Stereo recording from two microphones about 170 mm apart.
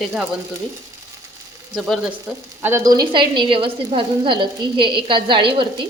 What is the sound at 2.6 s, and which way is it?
A woman's voice, 15° right (ahead or behind).